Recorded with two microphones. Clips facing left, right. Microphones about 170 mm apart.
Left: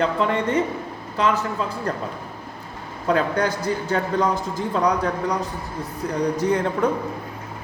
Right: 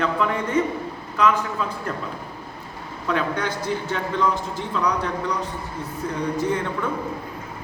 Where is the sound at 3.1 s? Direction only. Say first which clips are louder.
Left 4 dB; 40° left (ahead or behind).